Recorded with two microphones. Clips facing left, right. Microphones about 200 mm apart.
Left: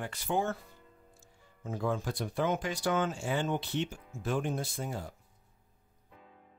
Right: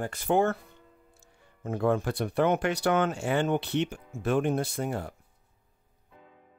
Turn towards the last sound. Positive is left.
turn(degrees=-65)  # may be behind; listen again after turning